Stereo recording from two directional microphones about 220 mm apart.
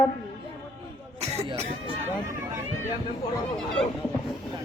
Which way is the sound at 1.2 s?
30° right (ahead or behind).